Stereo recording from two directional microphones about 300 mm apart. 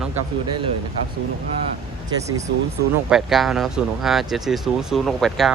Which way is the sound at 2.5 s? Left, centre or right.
Right.